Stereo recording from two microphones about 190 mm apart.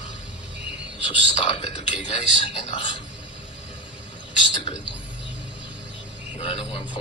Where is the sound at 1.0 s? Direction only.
30° left (ahead or behind).